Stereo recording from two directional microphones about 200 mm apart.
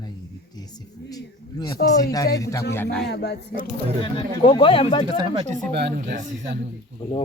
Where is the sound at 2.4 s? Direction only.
15° left (ahead or behind).